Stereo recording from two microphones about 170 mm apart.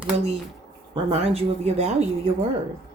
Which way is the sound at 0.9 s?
35° right (ahead or behind).